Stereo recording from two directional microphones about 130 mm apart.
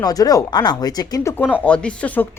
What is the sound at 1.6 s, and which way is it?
Speech, 10° left (ahead or behind).